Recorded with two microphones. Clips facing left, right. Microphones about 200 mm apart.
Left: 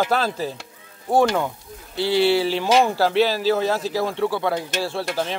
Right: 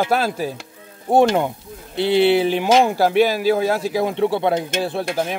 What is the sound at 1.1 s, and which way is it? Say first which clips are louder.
Speech: right 3 dB; 20° right (ahead or behind).